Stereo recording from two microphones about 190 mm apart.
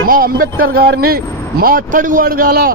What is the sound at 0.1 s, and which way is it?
Speech, 50° right (ahead or behind).